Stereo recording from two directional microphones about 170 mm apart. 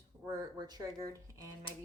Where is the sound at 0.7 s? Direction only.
20° right (ahead or behind).